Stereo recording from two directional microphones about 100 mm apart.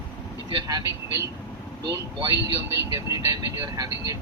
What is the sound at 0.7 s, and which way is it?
Speech, 40° right (ahead or behind).